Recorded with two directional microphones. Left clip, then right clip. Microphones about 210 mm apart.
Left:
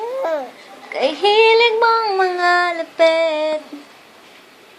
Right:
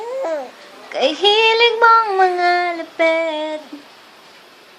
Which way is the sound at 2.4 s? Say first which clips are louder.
Left 1 dB; 10° right (ahead or behind).